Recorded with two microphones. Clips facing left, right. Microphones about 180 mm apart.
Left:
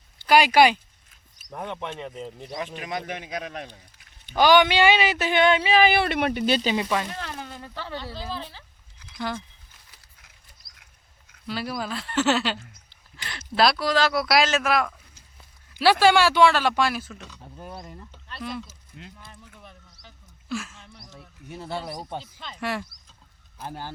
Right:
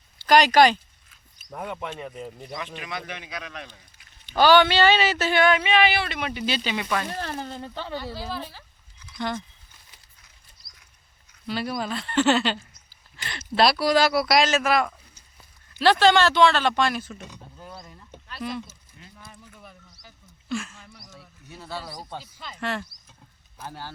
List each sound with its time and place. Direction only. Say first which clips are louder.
0.3 s speech: even; 10° left (ahead or behind)
1.5 s speech: even; 5° right (ahead or behind)
2.7 s speech: left 3 dB; 40° left (ahead or behind)
4.4 s speech: even; 15° left (ahead or behind); by 6.8 s 40° left (ahead or behind)
6.8 s speech: left 1 dB; 10° left (ahead or behind)
7.2 s speech: right 4 dB; 35° right (ahead or behind); by 8.6 s 10° right (ahead or behind)
11.4 s speech: right 2 dB; centre (ahead or behind)
13.8 s speech: right 2 dB; 10° right (ahead or behind)
17.6 s a sound: left 5 dB; 20° left (ahead or behind)
18.3 s speech: right 2 dB; centre (ahead or behind)
19.0 s speech: left 7 dB; 70° left (ahead or behind)
19.3 s a sound: right 1 dB; 5° right (ahead or behind)
21.6 s speech: left 3 dB; 25° left (ahead or behind)
22.5 s speech: even; 10° left (ahead or behind)